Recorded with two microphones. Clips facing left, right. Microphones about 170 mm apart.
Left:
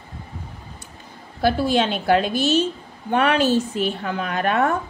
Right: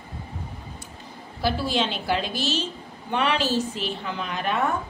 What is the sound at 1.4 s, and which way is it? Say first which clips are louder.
A woman's voice: left 6 dB; 50° left (ahead or behind).